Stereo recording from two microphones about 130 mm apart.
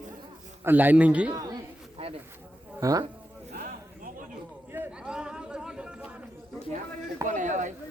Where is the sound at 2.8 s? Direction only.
25° right (ahead or behind).